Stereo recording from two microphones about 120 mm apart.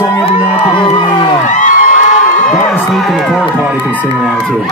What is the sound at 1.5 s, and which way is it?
Music, 90° left.